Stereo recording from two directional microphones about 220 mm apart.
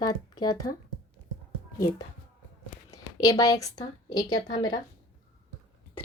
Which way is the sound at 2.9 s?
15° left (ahead or behind).